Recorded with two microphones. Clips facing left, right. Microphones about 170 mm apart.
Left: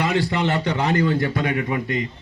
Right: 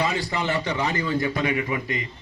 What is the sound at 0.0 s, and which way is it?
A man's voice, 70° left (ahead or behind).